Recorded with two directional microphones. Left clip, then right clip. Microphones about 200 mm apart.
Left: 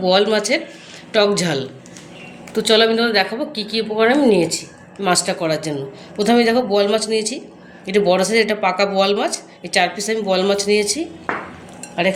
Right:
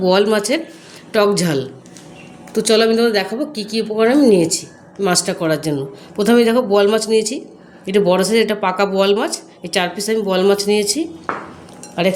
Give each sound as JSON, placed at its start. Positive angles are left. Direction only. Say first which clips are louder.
{"t": 0.0, "sound": "a woman's voice", "louder": "right 1 dB", "side_deg": -55}